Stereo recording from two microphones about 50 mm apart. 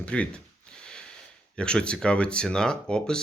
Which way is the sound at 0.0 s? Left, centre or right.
Left.